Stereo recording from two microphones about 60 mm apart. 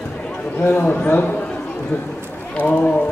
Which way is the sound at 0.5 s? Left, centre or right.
Left.